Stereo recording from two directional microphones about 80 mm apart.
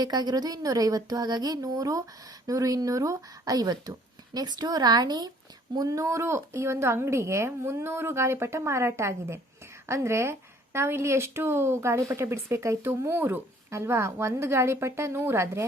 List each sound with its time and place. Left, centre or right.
0.0 s a woman's voice: right
5.7 s speech: right